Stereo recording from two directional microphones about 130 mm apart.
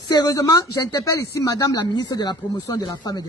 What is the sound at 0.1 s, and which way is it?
A man's voice, 30° left (ahead or behind).